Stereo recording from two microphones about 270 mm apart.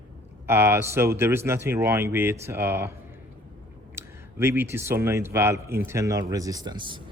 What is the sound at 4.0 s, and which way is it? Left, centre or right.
A man's voice, centre.